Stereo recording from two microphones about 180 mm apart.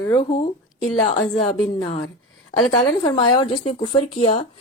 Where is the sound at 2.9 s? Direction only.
25° left (ahead or behind).